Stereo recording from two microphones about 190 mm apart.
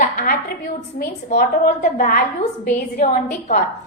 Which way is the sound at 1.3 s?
50° left (ahead or behind).